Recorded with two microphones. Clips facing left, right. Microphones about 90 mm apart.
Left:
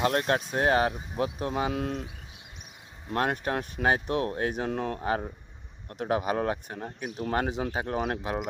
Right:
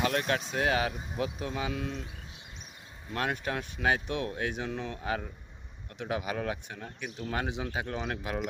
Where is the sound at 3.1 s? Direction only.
40° left (ahead or behind).